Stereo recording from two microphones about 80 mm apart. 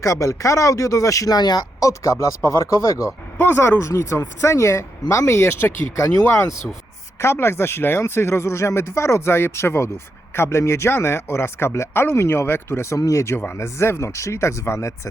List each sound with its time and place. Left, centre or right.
0.0 s speech: left
1.8 s speech: left